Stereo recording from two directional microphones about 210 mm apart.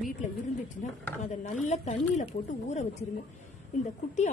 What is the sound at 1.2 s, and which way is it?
A woman's voice, 35° left (ahead or behind).